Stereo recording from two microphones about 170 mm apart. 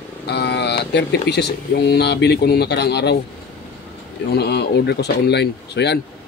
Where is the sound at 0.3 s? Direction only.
85° left.